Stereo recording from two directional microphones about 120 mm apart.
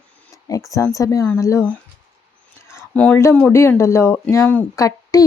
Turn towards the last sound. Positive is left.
turn(degrees=30)  # may be behind; listen again after turning